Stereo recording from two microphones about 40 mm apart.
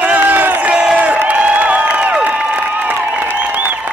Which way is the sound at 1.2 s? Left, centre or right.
Right.